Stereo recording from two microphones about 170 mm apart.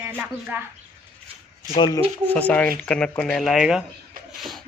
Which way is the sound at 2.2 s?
10° left (ahead or behind).